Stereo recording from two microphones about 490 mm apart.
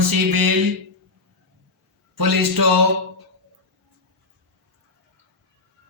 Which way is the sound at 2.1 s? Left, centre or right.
Right.